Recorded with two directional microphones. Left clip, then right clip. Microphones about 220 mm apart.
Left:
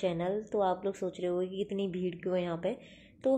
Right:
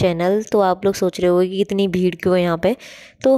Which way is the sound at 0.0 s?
45° right (ahead or behind).